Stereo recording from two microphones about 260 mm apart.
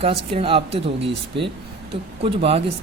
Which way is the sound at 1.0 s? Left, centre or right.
Right.